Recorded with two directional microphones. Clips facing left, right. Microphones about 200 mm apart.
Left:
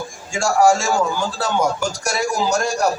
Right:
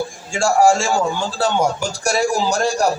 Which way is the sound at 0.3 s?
30° right (ahead or behind).